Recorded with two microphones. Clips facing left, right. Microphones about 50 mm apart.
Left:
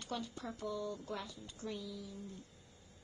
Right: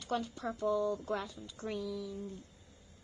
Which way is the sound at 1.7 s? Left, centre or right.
Right.